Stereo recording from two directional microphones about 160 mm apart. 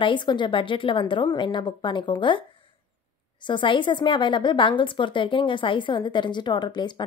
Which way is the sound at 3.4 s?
30° left (ahead or behind).